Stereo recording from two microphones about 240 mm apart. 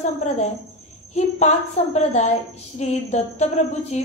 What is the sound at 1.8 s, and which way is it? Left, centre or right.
A woman's voice, left.